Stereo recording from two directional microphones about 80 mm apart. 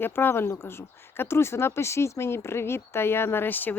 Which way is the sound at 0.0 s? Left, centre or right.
Left.